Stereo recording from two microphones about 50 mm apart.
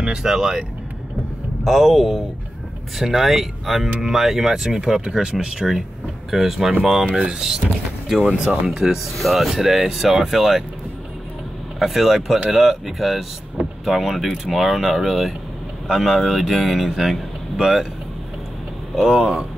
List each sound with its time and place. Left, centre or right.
0.0 s speech: centre
6.3 s speech: centre
8.3 s speech: right
9.2 s speech: centre
11.8 s speech: centre
18.9 s speech: centre